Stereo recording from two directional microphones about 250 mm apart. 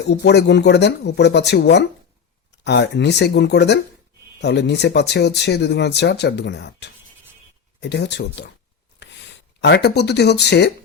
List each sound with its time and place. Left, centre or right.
0.0 s speech: left
9.0 s a sound: left
9.6 s speech: left